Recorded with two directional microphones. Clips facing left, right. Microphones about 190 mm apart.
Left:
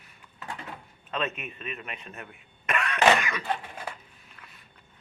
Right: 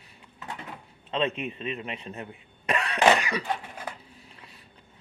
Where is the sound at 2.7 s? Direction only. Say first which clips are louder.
Right 1 dB; 35° right (ahead or behind).